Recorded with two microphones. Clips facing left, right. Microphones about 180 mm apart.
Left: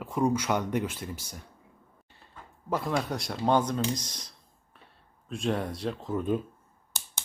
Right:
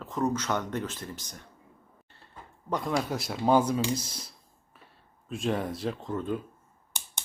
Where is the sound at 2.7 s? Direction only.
Centre (ahead or behind).